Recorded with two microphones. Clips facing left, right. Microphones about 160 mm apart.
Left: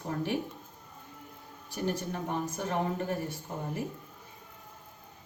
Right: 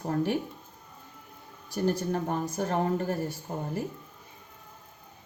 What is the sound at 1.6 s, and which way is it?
A woman's voice, 40° right (ahead or behind).